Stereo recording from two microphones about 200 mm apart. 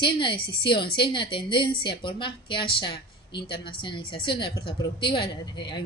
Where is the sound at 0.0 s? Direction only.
25° left (ahead or behind).